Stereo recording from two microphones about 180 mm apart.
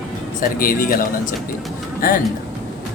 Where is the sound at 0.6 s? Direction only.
50° left (ahead or behind).